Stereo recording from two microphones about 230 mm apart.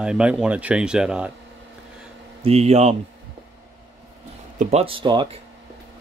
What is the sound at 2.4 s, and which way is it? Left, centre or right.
Speech, right.